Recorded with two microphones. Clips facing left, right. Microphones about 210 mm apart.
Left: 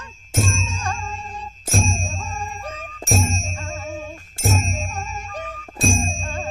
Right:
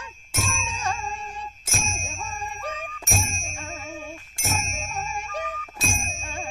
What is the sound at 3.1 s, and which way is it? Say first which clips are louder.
Music: left 9 dB; 35° left (ahead or behind).